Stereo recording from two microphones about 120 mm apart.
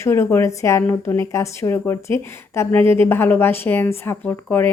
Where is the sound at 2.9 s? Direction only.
20° left (ahead or behind).